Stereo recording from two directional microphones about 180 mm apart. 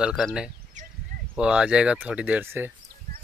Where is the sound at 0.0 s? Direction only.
Centre (ahead or behind).